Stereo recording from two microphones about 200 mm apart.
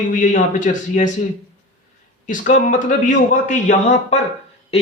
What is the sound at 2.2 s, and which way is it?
A man's voice, 40° left (ahead or behind).